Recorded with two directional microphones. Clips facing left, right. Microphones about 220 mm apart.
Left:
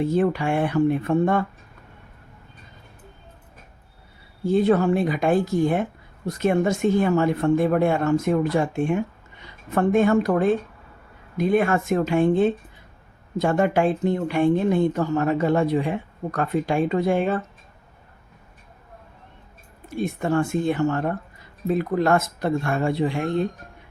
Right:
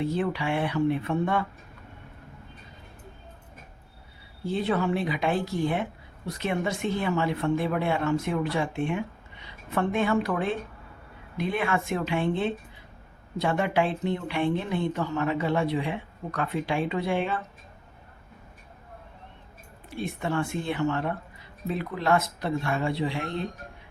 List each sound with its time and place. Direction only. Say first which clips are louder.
0.0 s speech: left 6 dB; 45° left (ahead or behind)
4.4 s speech: left 8 dB; 45° left (ahead or behind)
19.9 s speech: left 6 dB; 45° left (ahead or behind)